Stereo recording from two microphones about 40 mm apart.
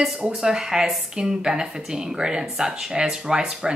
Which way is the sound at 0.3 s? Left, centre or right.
Centre.